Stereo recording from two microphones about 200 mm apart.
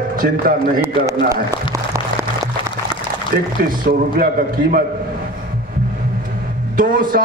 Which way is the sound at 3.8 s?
45° right (ahead or behind).